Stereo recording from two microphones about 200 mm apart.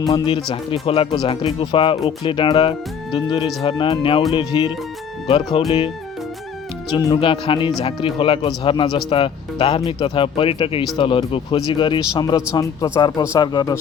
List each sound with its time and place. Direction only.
0.5 s speech: 25° left (ahead or behind)
6.9 s speech: 20° left (ahead or behind)